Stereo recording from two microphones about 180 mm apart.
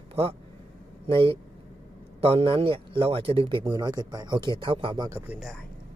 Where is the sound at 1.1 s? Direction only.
30° right (ahead or behind).